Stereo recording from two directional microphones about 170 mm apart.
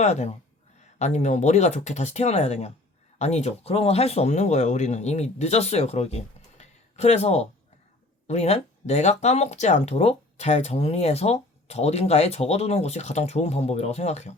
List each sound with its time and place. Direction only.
0.0 s speech: 40° left (ahead or behind)